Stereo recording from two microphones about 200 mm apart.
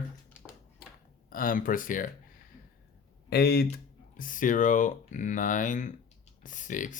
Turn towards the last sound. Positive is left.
turn(degrees=40)  # may be behind; listen again after turning